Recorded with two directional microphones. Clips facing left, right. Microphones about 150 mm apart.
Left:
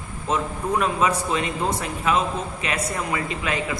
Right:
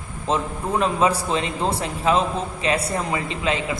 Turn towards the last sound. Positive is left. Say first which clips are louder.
# right 2 dB
turn(degrees=-25)  # may be behind; listen again after turning